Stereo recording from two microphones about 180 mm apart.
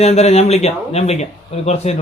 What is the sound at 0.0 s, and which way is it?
Speech, 35° left (ahead or behind).